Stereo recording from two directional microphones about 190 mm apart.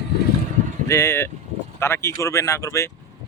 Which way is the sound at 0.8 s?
15° left (ahead or behind).